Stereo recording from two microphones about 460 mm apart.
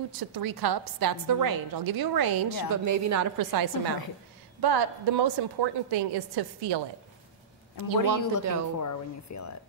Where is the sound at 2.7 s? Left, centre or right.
Right.